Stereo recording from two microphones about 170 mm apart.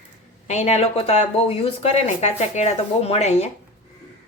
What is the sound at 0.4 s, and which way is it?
A woman's voice, 40° left (ahead or behind).